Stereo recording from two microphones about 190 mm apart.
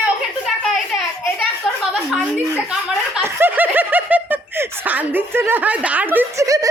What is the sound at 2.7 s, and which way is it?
Speech, 5° right (ahead or behind).